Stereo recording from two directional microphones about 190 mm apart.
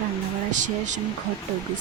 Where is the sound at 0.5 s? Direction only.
40° right (ahead or behind).